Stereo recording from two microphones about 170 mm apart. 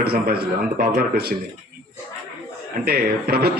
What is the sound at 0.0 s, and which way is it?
Speech, 65° right (ahead or behind).